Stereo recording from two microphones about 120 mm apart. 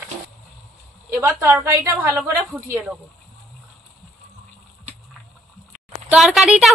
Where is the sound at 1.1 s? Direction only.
20° right (ahead or behind).